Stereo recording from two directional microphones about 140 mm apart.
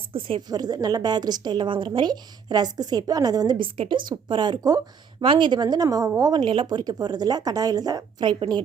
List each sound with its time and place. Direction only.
0.1 s a woman's voice: 40° right (ahead or behind)